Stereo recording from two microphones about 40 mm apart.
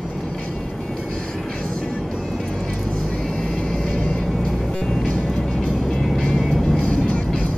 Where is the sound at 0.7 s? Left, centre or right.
Centre.